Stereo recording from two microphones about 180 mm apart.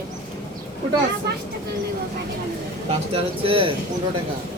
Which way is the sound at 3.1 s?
30° right (ahead or behind).